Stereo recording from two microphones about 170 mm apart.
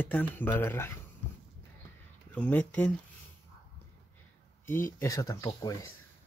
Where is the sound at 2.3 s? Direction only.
10° left (ahead or behind).